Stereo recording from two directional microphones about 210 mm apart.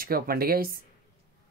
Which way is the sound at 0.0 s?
45° right (ahead or behind).